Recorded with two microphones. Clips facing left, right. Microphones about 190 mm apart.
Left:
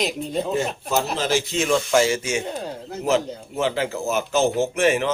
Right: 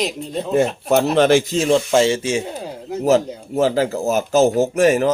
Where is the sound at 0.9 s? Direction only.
65° right (ahead or behind).